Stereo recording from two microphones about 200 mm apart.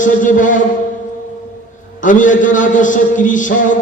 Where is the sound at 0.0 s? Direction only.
40° left (ahead or behind).